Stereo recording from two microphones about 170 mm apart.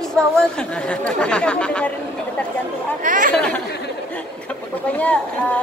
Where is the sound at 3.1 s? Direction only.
50° right (ahead or behind).